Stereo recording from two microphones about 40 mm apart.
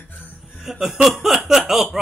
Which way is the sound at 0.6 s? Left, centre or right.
Centre.